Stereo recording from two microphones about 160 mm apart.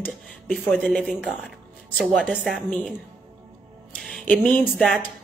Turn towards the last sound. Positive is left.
turn(degrees=0)  # may be behind; listen again after turning